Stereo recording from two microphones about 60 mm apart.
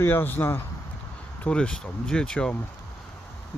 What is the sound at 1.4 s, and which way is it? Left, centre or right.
Speech, centre.